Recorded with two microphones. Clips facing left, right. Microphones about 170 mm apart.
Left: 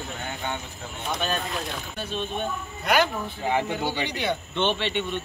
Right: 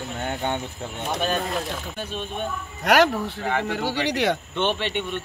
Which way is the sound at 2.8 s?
80° right.